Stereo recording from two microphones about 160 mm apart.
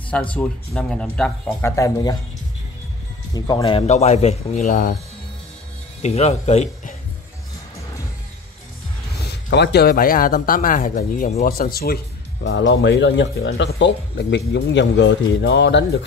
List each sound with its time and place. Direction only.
0.1 s speech: 10° left (ahead or behind)
1.8 s speech: 25° left (ahead or behind)
3.3 s a man's voice: 25° left (ahead or behind); by 4.9 s 55° left (ahead or behind)
6.0 s a man's voice: 45° left (ahead or behind)
9.5 s speech: 90° left; by 11.3 s 55° left (ahead or behind)
11.4 s speech: 65° left (ahead or behind)
13.0 s speech: 90° left